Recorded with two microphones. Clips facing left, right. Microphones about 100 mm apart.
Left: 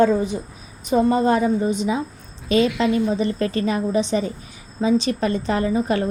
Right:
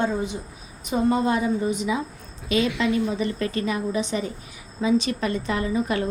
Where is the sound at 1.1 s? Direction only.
40° left (ahead or behind).